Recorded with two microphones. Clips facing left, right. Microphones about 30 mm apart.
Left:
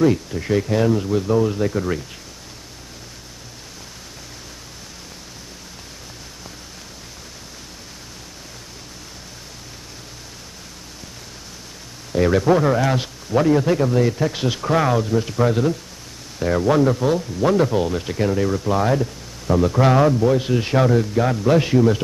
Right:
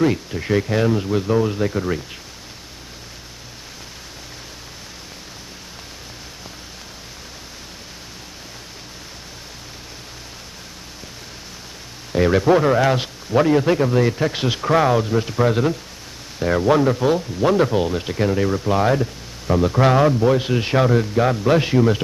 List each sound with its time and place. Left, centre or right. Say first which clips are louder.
0.0 s speech: left 1 dB; centre
12.1 s speech: right 1 dB; centre